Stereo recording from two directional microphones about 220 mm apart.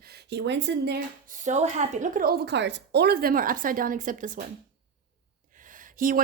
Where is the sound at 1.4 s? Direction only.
30° right (ahead or behind).